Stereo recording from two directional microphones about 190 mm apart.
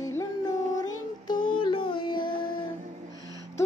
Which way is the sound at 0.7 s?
20° left (ahead or behind).